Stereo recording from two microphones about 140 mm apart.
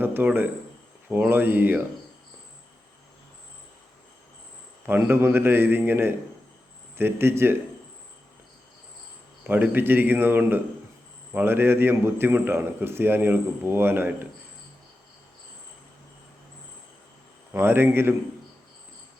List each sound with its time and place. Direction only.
0.0 s a man's voice: 15° right (ahead or behind)
4.9 s a man's voice: 15° right (ahead or behind)
9.5 s a man's voice: 15° right (ahead or behind)
17.5 s a man's voice: 15° right (ahead or behind)